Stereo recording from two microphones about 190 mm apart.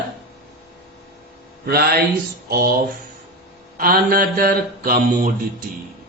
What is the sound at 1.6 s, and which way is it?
Speech, 55° right (ahead or behind).